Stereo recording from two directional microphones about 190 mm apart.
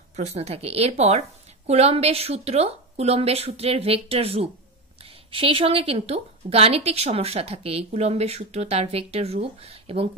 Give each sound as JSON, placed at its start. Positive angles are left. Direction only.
{"t": 0.1, "sound": "speech", "side_deg": -35}